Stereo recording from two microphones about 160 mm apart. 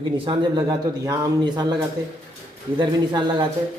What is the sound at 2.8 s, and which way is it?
Speech, 25° right (ahead or behind).